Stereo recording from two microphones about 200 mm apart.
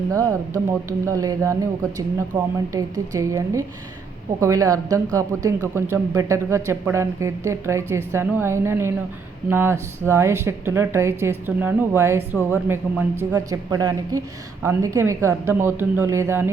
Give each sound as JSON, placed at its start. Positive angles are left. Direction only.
{"t": 0.1, "sound": "speech", "side_deg": -15}